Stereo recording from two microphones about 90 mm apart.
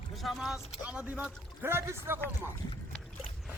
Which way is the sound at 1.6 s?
25° right (ahead or behind).